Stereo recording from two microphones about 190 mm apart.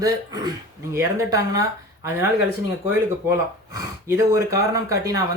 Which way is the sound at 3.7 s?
15° right (ahead or behind).